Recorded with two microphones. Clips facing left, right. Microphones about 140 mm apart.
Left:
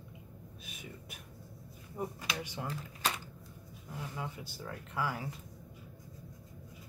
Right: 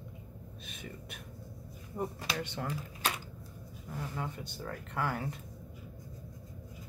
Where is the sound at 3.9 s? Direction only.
5° left (ahead or behind).